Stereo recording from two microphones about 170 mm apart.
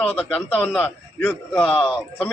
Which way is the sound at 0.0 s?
5° left (ahead or behind).